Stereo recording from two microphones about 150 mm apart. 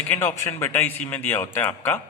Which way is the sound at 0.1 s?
15° left (ahead or behind).